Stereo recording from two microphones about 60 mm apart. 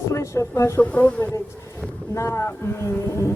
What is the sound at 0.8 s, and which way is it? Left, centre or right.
Speech, left.